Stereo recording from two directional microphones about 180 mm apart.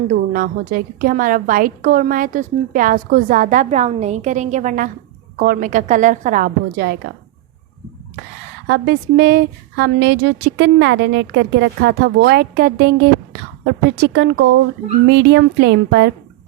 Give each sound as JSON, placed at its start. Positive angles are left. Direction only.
{"t": 0.1, "sound": "a woman's voice", "side_deg": -50}
{"t": 8.6, "sound": "a woman's voice", "side_deg": -70}
{"t": 14.0, "sound": "a woman's voice", "side_deg": -75}